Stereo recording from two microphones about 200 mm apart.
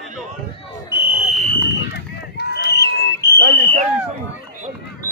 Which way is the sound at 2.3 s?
55° left (ahead or behind).